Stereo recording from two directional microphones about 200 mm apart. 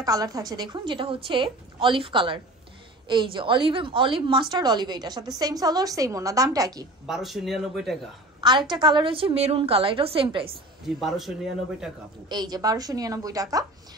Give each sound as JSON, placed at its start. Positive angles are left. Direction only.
{"t": 0.0, "sound": "a woman's voice", "side_deg": -15}
{"t": 7.1, "sound": "a man's voice", "side_deg": 0}
{"t": 8.4, "sound": "a woman's voice", "side_deg": -20}
{"t": 10.5, "sound": "a man's voice", "side_deg": 0}
{"t": 12.3, "sound": "a woman's voice", "side_deg": -20}